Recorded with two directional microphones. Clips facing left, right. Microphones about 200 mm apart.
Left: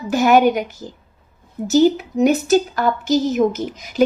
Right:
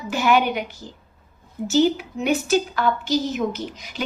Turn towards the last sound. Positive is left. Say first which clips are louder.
# left 5 dB
turn(degrees=45)  # may be behind; listen again after turning